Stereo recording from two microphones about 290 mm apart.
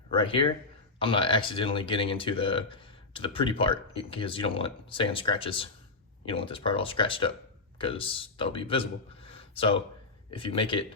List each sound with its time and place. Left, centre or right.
0.2 s speech: centre